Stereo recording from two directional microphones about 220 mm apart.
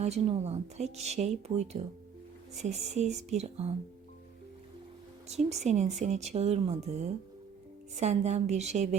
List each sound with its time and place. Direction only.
0.0 s a woman's voice: 30° right (ahead or behind)
5.3 s speech: 30° right (ahead or behind)